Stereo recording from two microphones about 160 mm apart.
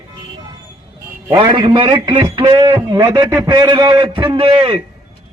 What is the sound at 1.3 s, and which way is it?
A man's voice, 30° right (ahead or behind).